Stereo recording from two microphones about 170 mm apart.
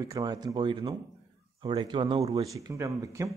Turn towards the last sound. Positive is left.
turn(degrees=-20)  # may be behind; listen again after turning